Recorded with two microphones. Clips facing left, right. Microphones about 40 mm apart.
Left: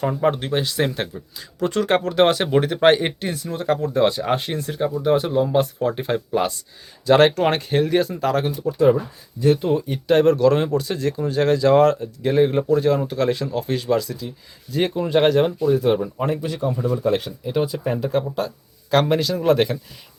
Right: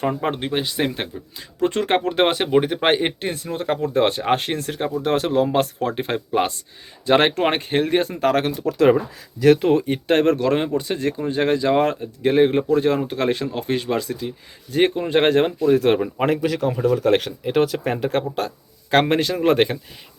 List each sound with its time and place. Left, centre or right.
0.0 s speech: right
1.4 s speech: right; by 3.1 s centre
3.2 s speech: right
5.5 s speech: right
8.6 s speech: right
9.8 s speech: right
15.6 s speech: right
17.9 s speech: right